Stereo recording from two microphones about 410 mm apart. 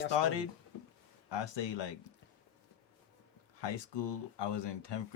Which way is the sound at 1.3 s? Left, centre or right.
Left.